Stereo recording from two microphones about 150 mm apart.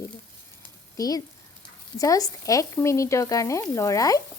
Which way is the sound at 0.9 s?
25° left (ahead or behind).